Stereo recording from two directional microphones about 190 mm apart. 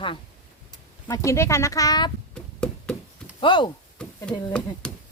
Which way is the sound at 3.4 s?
25° left (ahead or behind).